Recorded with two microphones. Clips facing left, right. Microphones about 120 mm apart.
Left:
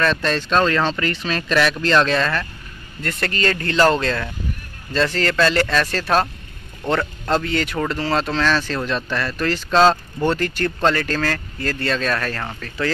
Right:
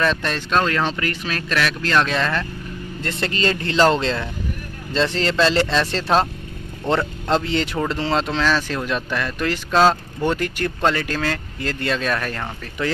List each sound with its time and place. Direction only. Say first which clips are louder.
0.0 s speech: left 2 dB; 15° right (ahead or behind)
3.0 s speech: even; 25° right (ahead or behind)